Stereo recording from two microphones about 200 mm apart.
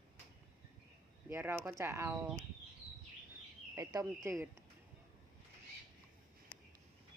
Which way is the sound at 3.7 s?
15° right (ahead or behind).